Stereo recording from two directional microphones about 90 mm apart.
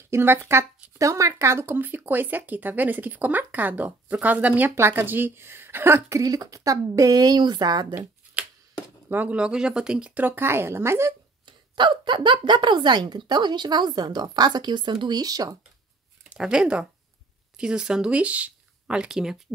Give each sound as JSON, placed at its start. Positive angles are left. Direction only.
{"t": 0.1, "sound": "speech", "side_deg": -30}
{"t": 9.1, "sound": "speech", "side_deg": -15}
{"t": 11.4, "sound": "speech", "side_deg": -60}
{"t": 16.3, "sound": "speech", "side_deg": -10}